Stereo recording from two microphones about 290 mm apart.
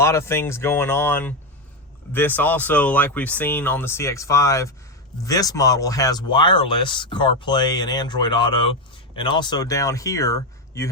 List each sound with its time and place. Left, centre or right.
0.0 s speech: centre